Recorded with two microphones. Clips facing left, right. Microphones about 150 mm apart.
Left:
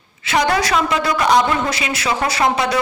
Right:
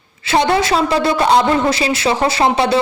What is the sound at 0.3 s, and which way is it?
A woman's voice, 30° right (ahead or behind).